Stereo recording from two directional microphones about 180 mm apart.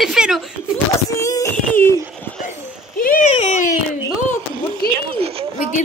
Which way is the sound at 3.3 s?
40° left (ahead or behind).